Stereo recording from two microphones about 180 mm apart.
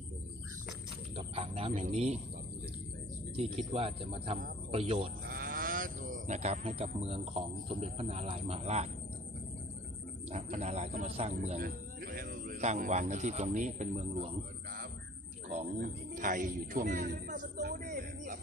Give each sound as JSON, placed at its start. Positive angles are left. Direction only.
{"t": 1.1, "sound": "speech", "side_deg": -35}
{"t": 3.3, "sound": "speech", "side_deg": -35}
{"t": 5.2, "sound": "speech", "side_deg": -55}
{"t": 10.3, "sound": "speech", "side_deg": -40}
{"t": 11.6, "sound": "speech", "side_deg": -55}
{"t": 15.4, "sound": "a man's voice", "side_deg": -45}